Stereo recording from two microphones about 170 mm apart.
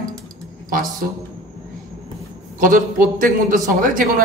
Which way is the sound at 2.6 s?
55° right (ahead or behind).